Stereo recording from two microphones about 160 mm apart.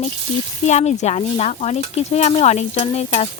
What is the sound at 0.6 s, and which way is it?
Sizzle, 45° left (ahead or behind).